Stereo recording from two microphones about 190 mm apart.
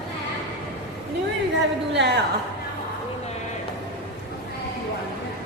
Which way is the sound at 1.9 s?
65° right (ahead or behind).